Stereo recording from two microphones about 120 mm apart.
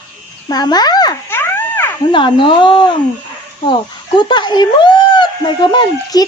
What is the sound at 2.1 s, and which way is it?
Speech, 45° left (ahead or behind).